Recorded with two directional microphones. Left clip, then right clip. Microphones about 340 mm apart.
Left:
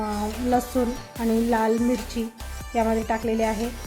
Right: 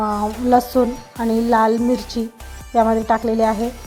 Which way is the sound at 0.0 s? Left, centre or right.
Centre.